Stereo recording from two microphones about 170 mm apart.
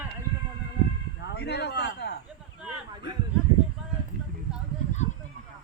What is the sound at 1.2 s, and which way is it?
Speech, 85° left.